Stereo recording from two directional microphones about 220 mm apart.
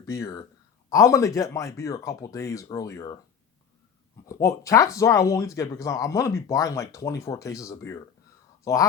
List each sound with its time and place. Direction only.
0.0 s speech: 15° left (ahead or behind)
4.3 s speech: 15° left (ahead or behind)